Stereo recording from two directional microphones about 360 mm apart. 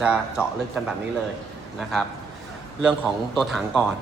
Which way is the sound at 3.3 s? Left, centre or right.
Centre.